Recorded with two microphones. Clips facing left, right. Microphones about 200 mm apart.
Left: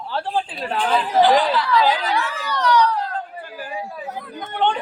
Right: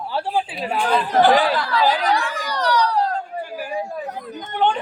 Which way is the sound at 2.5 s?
35° right (ahead or behind).